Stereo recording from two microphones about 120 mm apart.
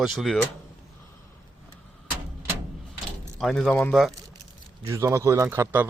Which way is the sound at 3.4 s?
5° left (ahead or behind).